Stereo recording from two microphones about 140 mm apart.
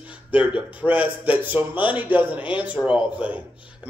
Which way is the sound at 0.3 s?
10° right (ahead or behind).